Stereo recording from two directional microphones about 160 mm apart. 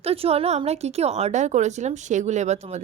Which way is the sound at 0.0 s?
40° right (ahead or behind).